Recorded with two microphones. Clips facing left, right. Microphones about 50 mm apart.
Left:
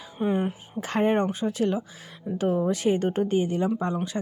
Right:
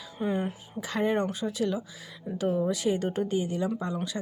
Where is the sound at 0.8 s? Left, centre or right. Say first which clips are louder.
Left 4 dB; left.